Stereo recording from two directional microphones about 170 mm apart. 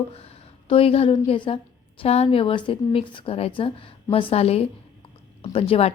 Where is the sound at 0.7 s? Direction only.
35° left (ahead or behind).